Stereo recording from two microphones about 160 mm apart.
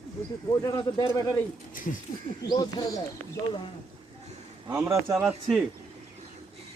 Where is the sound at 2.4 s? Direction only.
25° left (ahead or behind).